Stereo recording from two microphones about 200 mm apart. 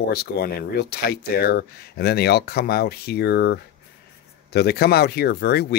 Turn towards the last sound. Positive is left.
turn(degrees=50)  # may be behind; listen again after turning